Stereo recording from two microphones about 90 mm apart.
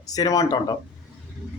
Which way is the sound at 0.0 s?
45° left (ahead or behind).